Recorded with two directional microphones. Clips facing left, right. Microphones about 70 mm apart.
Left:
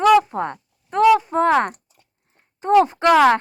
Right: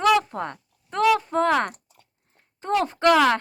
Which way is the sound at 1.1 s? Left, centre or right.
Centre.